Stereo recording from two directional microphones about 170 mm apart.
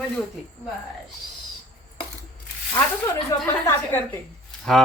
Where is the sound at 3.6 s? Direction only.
15° left (ahead or behind).